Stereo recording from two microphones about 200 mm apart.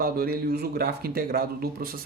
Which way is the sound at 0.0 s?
50° right (ahead or behind).